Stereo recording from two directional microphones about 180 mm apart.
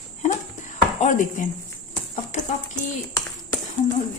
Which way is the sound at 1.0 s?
45° left (ahead or behind).